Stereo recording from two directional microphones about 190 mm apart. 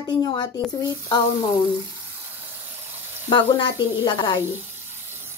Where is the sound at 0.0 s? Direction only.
25° left (ahead or behind).